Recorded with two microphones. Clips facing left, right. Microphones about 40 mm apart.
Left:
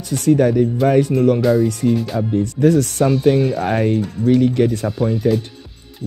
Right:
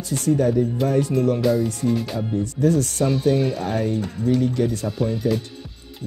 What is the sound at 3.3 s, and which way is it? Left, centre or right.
Speech, centre.